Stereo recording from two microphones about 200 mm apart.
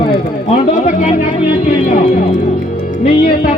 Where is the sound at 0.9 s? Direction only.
40° left (ahead or behind).